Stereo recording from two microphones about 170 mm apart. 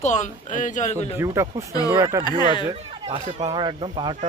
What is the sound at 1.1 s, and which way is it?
Speech, 20° right (ahead or behind).